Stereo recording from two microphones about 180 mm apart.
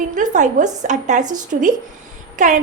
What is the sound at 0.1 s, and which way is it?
A woman's voice, 45° right (ahead or behind).